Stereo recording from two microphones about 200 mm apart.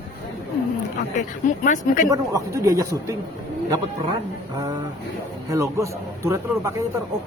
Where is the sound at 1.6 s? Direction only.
40° left (ahead or behind).